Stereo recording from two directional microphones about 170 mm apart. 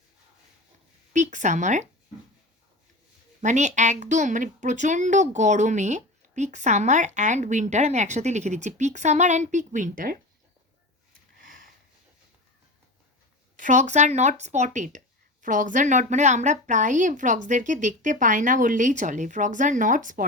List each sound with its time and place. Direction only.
1.1 s a woman's voice: 45° right (ahead or behind)
3.4 s a woman's voice: 45° right (ahead or behind)
11.3 s a sound: 55° right (ahead or behind)
13.6 s a woman's voice: 45° right (ahead or behind)